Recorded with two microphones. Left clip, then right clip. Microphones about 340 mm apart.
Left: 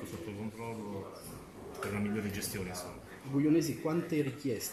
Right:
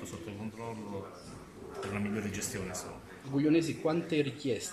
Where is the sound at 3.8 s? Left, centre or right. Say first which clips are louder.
Right 3 dB; right.